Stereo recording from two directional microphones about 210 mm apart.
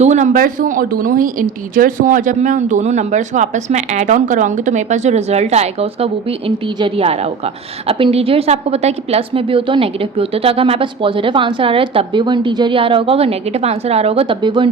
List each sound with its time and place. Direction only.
0.0 s speech: 35° right (ahead or behind)